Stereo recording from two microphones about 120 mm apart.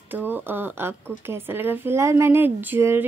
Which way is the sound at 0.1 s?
15° right (ahead or behind).